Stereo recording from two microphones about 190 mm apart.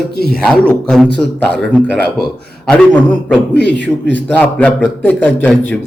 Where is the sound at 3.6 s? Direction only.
70° left (ahead or behind).